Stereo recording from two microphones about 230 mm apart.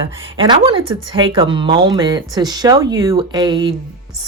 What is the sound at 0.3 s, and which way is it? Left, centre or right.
Speech, right.